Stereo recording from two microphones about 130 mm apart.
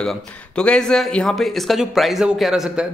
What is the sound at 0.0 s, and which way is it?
A man's voice, 5° left (ahead or behind).